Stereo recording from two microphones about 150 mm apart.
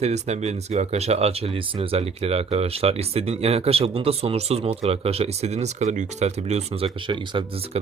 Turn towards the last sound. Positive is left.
turn(degrees=-40)  # may be behind; listen again after turning